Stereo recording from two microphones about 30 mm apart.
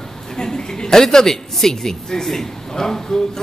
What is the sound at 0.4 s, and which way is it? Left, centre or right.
A woman's voice, centre.